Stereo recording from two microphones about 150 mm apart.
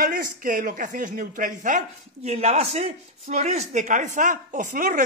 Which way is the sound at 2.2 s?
45° right (ahead or behind).